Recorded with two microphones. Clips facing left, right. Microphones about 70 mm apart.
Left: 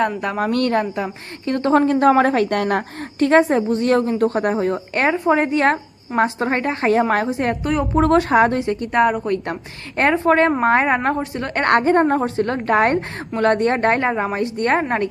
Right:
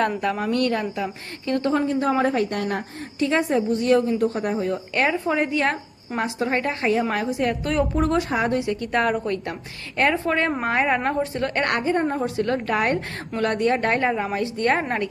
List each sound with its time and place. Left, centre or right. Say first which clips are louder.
0.3 s a woman's voice: left 4 dB; left
1.7 s a woman's voice: left 10 dB; left
3.2 s a woman's voice: left 6 dB; left
4.7 s a woman's voice: left 3 dB; left
7.6 s a woman's voice: left 3 dB; left
8.1 s a woman's voice: left 7 dB; left
11.8 s a woman's voice: left 7 dB; left
12.2 s a woman's voice: left 3 dB; left